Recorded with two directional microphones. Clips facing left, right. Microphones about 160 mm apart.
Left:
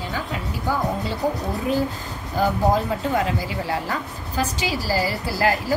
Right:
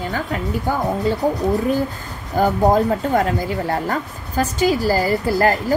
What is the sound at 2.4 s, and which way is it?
Speech, 50° right (ahead or behind).